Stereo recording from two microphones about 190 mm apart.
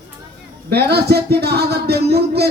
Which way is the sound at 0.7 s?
60° right (ahead or behind).